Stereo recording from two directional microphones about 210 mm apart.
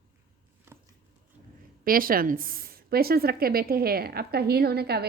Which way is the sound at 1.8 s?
45° right (ahead or behind).